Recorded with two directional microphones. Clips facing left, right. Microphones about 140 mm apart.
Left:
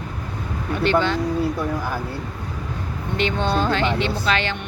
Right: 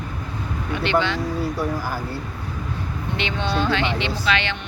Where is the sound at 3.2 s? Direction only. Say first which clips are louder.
Left 3 dB; 45° left (ahead or behind).